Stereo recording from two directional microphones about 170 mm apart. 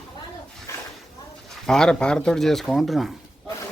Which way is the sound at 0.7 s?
15° left (ahead or behind).